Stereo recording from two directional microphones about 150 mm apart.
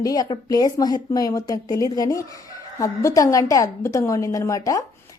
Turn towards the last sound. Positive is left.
turn(degrees=20)  # may be behind; listen again after turning